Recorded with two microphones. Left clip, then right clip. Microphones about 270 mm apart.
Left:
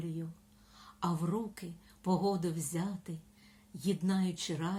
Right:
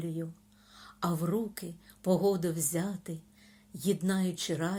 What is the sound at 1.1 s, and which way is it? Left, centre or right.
Speech, centre.